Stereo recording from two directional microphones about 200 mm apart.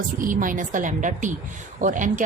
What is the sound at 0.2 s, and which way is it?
A woman's voice, 40° right (ahead or behind).